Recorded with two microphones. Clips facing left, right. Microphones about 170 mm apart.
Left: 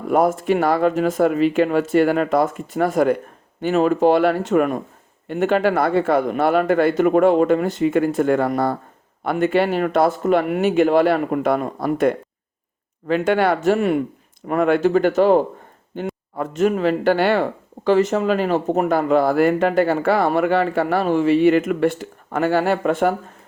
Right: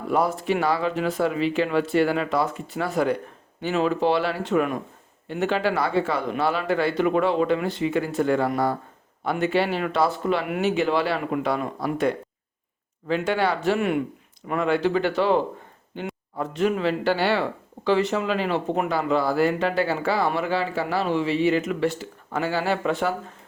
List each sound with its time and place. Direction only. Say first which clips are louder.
0.1 s speech: left 6 dB; 50° left (ahead or behind)
14.4 s speech: left 5 dB; 50° left (ahead or behind)